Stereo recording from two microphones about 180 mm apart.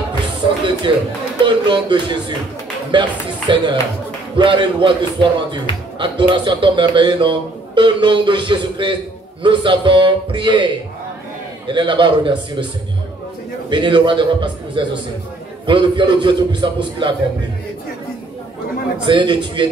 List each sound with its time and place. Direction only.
0.9 s speech: 30° right (ahead or behind)
13.7 s speech: 25° right (ahead or behind)
19.0 s speech: 25° right (ahead or behind)